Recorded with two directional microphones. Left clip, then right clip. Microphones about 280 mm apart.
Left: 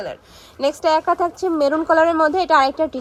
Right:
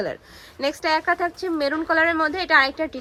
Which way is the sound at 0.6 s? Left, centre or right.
Centre.